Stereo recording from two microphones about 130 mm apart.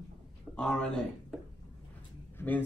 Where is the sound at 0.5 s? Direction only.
5° left (ahead or behind).